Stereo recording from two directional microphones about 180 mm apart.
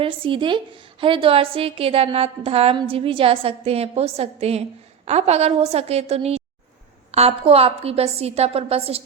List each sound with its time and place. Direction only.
0.0 s a woman's voice: 30° right (ahead or behind)